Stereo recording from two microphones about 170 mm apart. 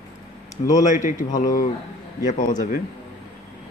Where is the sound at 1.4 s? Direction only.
55° left (ahead or behind).